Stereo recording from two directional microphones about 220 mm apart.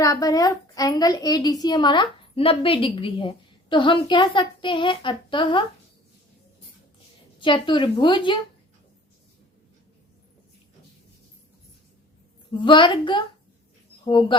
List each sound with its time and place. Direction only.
0.0 s a woman's voice: 15° left (ahead or behind)
7.3 s a woman's voice: 20° left (ahead or behind)
12.5 s a woman's voice: 20° left (ahead or behind)